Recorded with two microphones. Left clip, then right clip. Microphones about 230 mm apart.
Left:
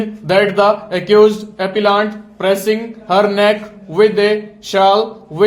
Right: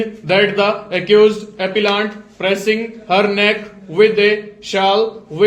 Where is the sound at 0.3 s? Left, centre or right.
Left.